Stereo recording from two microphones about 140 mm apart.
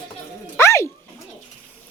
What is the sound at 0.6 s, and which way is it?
Bird, 20° left (ahead or behind).